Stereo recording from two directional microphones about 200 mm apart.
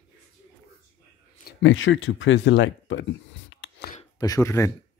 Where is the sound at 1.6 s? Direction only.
70° left (ahead or behind).